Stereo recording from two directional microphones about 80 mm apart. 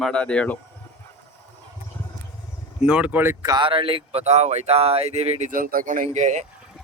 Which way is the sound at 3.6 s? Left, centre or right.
Right.